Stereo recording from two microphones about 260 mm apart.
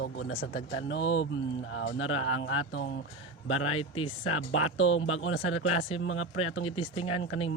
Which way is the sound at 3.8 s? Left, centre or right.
Left.